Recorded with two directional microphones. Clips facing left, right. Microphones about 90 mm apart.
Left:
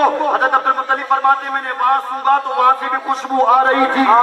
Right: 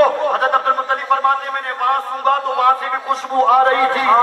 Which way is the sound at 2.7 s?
20° left (ahead or behind).